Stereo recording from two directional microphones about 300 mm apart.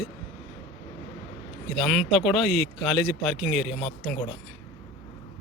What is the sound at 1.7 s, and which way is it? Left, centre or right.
Speech, centre.